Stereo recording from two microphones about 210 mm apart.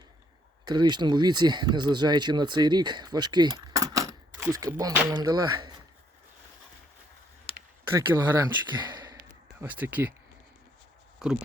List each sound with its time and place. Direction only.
0.6 s speech: 20° right (ahead or behind)
7.5 s a sound: 25° left (ahead or behind)
7.9 s speech: 15° right (ahead or behind)
11.2 s speech: 5° right (ahead or behind)